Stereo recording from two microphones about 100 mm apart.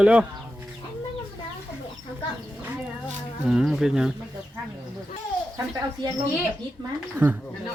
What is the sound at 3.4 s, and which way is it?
Speech, 5° right (ahead or behind).